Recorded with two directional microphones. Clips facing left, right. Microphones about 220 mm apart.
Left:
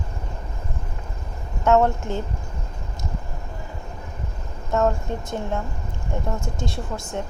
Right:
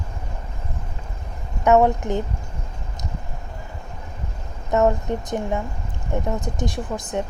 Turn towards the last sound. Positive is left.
turn(degrees=-15)  # may be behind; listen again after turning